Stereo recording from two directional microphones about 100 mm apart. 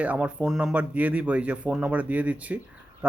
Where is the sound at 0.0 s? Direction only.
15° right (ahead or behind).